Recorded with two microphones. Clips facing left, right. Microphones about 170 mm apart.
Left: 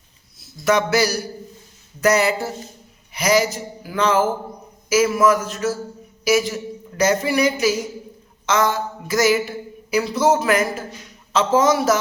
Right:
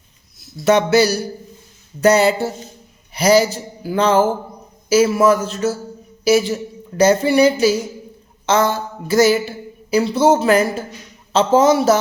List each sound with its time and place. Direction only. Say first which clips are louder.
0.6 s speech: right 4 dB; 25° right (ahead or behind)